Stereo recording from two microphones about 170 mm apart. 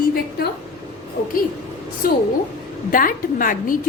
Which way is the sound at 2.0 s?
60° left (ahead or behind).